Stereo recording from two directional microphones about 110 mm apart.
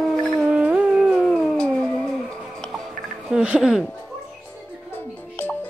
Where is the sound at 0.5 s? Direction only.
10° right (ahead or behind).